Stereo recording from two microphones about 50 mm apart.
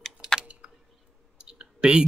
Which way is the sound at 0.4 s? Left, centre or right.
Right.